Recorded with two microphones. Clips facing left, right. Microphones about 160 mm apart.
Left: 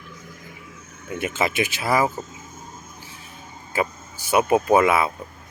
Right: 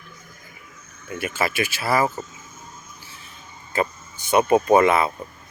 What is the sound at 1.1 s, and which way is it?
Speech, 20° left (ahead or behind).